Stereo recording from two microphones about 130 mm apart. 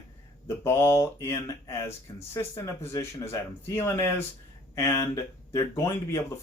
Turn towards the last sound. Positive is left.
turn(degrees=20)  # may be behind; listen again after turning